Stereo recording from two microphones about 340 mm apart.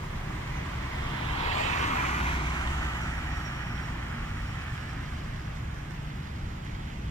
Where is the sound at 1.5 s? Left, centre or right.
Centre.